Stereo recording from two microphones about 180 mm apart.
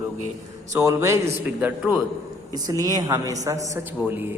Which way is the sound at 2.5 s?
20° right (ahead or behind).